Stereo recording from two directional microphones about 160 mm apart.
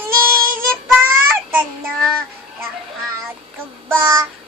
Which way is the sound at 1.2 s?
15° right (ahead or behind).